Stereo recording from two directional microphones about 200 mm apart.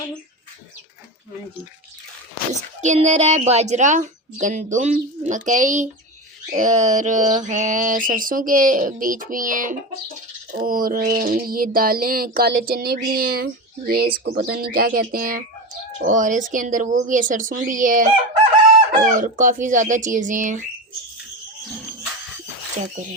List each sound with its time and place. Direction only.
2.5 s a woman's voice: 35° right (ahead or behind)
19.1 s a woman's voice: 40° right (ahead or behind)